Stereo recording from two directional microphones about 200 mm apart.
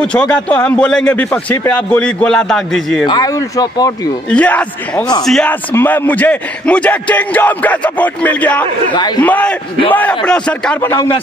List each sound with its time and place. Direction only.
0.0 s a man's voice: 5° left (ahead or behind)
3.1 s speech: 20° left (ahead or behind)
4.3 s speech: 5° left (ahead or behind)
8.9 s a man's voice: 20° left (ahead or behind)
9.2 s a man's voice: 5° left (ahead or behind)